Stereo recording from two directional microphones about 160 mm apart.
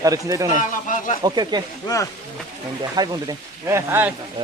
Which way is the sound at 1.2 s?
25° right (ahead or behind).